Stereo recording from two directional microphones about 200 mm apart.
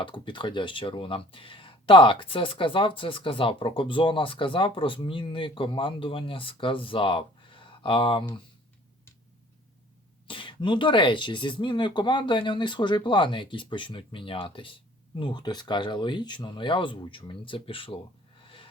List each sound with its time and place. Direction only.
0.0 s speech: 25° left (ahead or behind)
10.2 s speech: 25° left (ahead or behind)
18.4 s snort: 25° left (ahead or behind)